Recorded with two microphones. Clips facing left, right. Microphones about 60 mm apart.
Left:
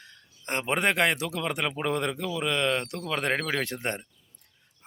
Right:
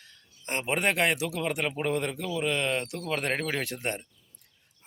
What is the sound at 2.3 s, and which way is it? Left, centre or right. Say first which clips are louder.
Speech: left 1 dB; left.